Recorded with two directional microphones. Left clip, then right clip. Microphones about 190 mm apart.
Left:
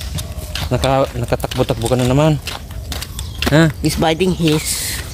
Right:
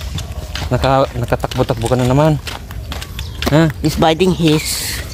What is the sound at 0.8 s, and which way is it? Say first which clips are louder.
Speech: right 2 dB; 15° right (ahead or behind).